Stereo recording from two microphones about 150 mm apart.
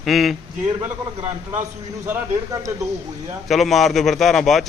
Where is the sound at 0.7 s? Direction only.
20° right (ahead or behind).